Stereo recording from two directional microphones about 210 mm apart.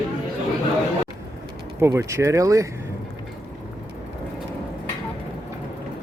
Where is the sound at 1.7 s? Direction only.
15° right (ahead or behind).